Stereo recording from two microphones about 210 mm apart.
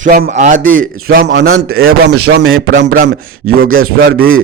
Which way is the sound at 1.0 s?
45° right (ahead or behind).